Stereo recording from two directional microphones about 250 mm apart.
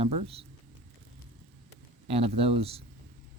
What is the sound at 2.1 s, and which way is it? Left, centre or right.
Speech, right.